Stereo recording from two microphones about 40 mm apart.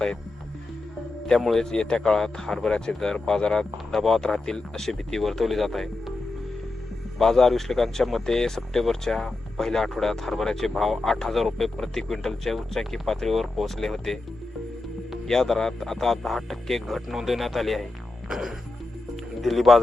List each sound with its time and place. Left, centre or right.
1.5 s speech: left; by 5.9 s centre
7.2 s speech: centre
15.3 s speech: centre
18.3 s music: centre
19.4 s speech: centre